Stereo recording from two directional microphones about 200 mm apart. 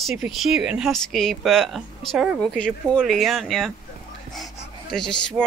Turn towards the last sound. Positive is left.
turn(degrees=5)  # may be behind; listen again after turning